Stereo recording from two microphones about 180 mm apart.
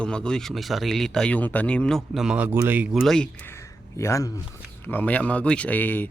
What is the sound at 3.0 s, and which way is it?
Speech, 5° left (ahead or behind).